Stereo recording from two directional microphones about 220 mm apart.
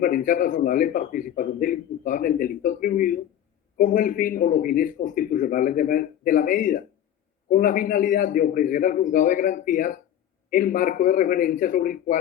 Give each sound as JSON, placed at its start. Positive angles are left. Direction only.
{"t": 0.0, "sound": "speech", "side_deg": 40}